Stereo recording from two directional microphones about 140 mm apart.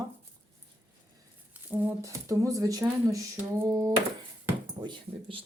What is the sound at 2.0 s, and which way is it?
Speech, 25° right (ahead or behind).